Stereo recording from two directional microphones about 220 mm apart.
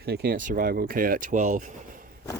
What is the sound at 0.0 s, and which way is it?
Speech, 45° right (ahead or behind).